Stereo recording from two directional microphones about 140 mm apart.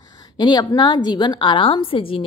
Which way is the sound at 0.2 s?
30° left (ahead or behind).